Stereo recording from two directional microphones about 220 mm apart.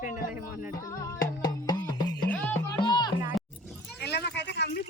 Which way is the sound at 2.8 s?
20° left (ahead or behind).